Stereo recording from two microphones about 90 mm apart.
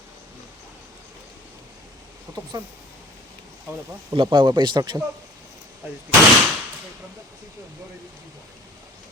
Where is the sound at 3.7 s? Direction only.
30° right (ahead or behind).